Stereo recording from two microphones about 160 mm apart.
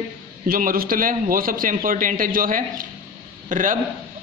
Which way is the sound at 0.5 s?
60° right (ahead or behind).